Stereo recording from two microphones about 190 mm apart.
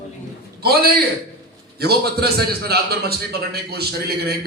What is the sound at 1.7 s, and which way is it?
A man's voice, 55° right (ahead or behind).